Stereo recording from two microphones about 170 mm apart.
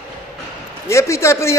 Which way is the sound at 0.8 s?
15° left (ahead or behind).